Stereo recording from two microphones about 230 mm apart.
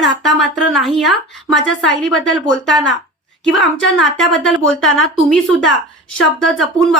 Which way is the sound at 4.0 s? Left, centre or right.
Centre.